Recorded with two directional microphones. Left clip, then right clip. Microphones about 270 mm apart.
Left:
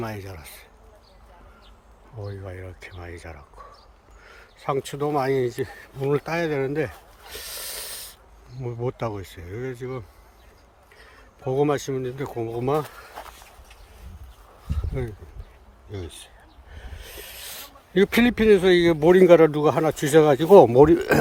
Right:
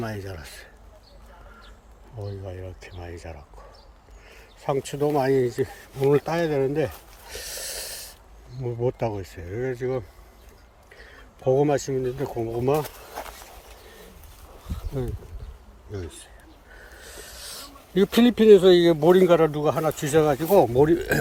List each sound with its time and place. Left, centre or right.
0.0 s speech: centre
2.1 s speech: centre
11.5 s speech: centre
15.9 s speech: centre
17.0 s rub: centre
17.6 s speech: centre